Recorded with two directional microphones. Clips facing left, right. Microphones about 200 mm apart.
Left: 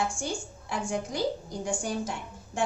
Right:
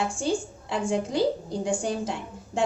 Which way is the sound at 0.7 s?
25° right (ahead or behind).